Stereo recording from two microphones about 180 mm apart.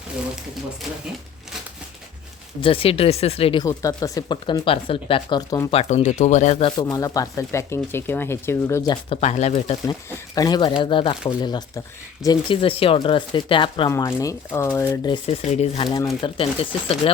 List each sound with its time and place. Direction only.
2.6 s speech: 30° left (ahead or behind)
3.7 s speech: 20° left (ahead or behind)
5.7 s speech: 40° left (ahead or behind)
6.9 s speech: 20° left (ahead or behind)
9.0 s speech: 40° left (ahead or behind)
9.8 s speech: 20° left (ahead or behind)
13.9 s speech: 15° left (ahead or behind)
15.0 s speech: 30° left (ahead or behind)
16.0 s speech: 20° left (ahead or behind)